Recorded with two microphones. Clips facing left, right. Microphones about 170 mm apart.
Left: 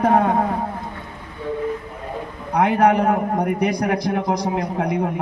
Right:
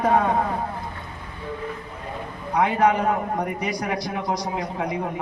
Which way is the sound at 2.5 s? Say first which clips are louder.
Left 3 dB; 60° left (ahead or behind).